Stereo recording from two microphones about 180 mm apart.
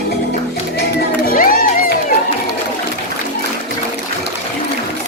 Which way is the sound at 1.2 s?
50° left (ahead or behind).